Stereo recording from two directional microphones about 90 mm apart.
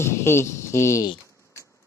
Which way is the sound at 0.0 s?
30° left (ahead or behind).